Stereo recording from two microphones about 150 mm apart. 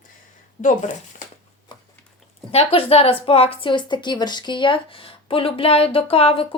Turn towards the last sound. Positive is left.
turn(degrees=40)  # may be behind; listen again after turning